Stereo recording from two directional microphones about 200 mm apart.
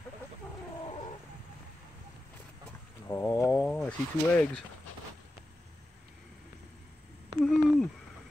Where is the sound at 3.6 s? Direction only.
5° left (ahead or behind).